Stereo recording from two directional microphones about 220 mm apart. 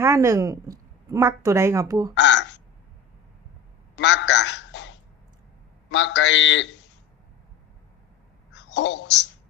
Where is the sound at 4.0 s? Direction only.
55° left (ahead or behind).